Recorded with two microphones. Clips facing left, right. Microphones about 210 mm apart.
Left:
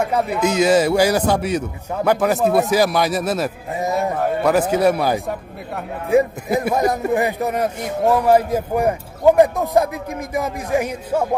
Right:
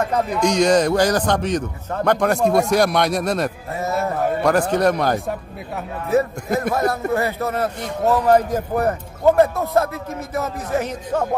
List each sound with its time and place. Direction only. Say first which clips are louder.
0.0 s a man's voice: left 1 dB; 10° left (ahead or behind)
3.8 s a man's voice: left 1 dB; 15° left (ahead or behind)